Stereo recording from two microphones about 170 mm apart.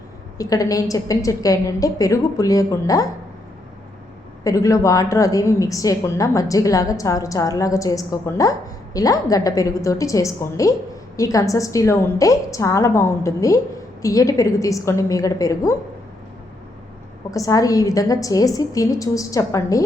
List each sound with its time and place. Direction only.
0.3 s a woman's voice: 20° left (ahead or behind)
4.4 s a woman's voice: 20° left (ahead or behind)
17.3 s a woman's voice: 20° left (ahead or behind)